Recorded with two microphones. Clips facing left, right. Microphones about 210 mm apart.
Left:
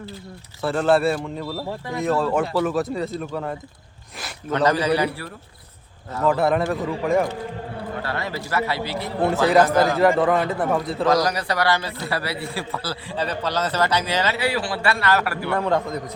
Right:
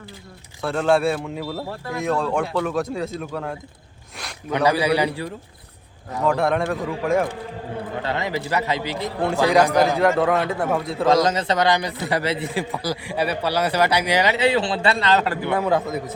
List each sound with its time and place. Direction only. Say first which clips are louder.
0.6 s speech: left 1 dB; centre (ahead or behind)
4.5 s a man's voice: even; 10° right (ahead or behind)
6.2 s speech: left 1 dB; 5° left (ahead or behind)
8.0 s a man's voice: right 3 dB; 20° right (ahead or behind)
10.0 s speech: left 1 dB; centre (ahead or behind)
11.0 s a man's voice: right 3 dB; 25° right (ahead or behind)
15.5 s speech: right 1 dB; 5° right (ahead or behind)